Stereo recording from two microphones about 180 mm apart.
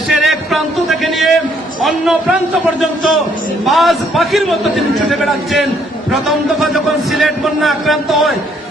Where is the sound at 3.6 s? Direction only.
Centre (ahead or behind).